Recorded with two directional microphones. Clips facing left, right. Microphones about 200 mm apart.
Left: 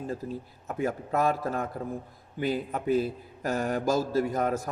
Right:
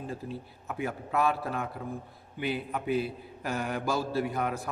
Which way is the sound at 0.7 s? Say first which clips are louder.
Left 3 dB; 45° left (ahead or behind).